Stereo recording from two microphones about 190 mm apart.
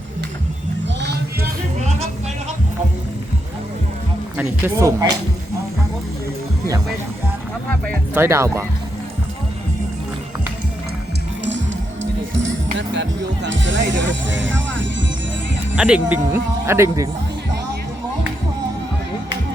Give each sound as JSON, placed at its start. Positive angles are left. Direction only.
{"t": 4.4, "sound": "speech", "side_deg": -10}
{"t": 8.1, "sound": "speech", "side_deg": -15}
{"t": 12.7, "sound": "speech", "side_deg": -70}
{"t": 15.7, "sound": "speech", "side_deg": -5}